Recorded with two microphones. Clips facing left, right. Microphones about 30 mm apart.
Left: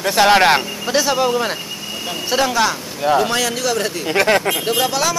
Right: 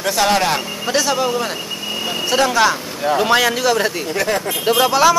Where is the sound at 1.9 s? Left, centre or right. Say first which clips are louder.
Right 4 dB; centre.